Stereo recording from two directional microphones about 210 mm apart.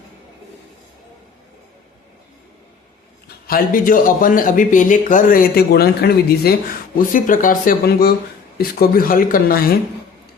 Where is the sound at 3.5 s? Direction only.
45° left (ahead or behind).